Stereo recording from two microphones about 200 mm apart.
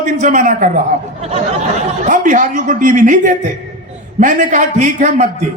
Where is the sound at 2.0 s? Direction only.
40° right (ahead or behind).